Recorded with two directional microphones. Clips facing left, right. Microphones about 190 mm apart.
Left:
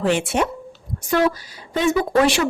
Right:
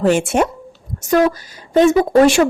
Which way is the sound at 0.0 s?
45° right (ahead or behind).